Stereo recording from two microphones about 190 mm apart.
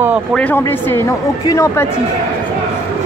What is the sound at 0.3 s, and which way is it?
Speech, 10° left (ahead or behind).